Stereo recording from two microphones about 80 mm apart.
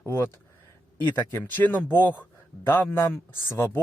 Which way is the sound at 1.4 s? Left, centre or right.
Left.